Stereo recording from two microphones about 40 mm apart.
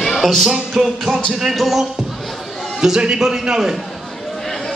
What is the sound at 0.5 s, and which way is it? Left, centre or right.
Music, centre.